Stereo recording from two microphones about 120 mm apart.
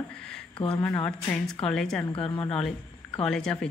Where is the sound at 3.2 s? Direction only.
5° left (ahead or behind).